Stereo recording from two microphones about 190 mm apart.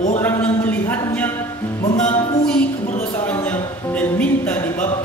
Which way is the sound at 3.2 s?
10° left (ahead or behind).